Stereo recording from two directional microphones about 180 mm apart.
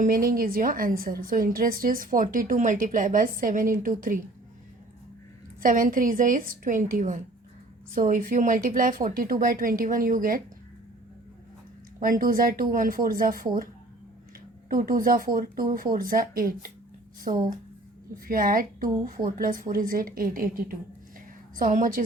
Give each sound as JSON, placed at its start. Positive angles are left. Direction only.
{"t": 0.0, "sound": "a woman's voice", "side_deg": -50}
{"t": 5.6, "sound": "a woman's voice", "side_deg": -50}
{"t": 11.9, "sound": "a woman's voice", "side_deg": -50}
{"t": 14.7, "sound": "a woman's voice", "side_deg": -50}
{"t": 17.3, "sound": "speech", "side_deg": -40}
{"t": 18.3, "sound": "a woman's voice", "side_deg": -50}